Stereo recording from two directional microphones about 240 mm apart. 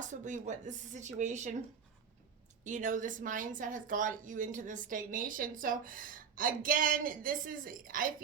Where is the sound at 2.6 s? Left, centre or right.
Right.